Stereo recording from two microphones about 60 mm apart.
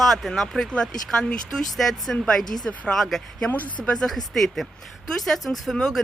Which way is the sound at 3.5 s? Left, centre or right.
Left.